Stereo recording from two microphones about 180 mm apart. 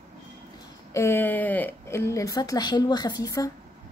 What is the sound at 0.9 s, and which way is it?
A woman's voice, 15° left (ahead or behind).